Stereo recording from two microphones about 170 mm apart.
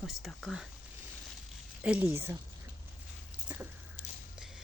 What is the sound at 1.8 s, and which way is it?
Speech, 10° right (ahead or behind).